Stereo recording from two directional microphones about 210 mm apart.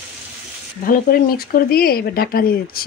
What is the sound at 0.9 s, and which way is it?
Speech, 45° left (ahead or behind).